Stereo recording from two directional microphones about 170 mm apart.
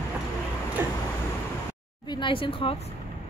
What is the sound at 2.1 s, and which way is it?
Speech, 30° left (ahead or behind).